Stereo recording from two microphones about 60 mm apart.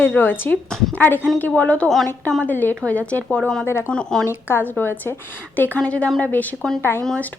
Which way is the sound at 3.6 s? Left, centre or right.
Left.